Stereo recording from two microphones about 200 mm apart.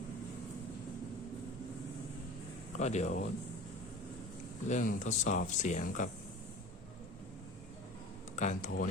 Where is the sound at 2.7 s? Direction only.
35° left (ahead or behind).